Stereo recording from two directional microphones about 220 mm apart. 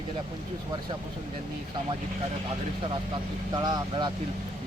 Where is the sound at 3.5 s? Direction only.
20° right (ahead or behind).